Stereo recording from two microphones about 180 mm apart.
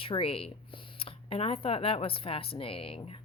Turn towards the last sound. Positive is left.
turn(degrees=30)  # may be behind; listen again after turning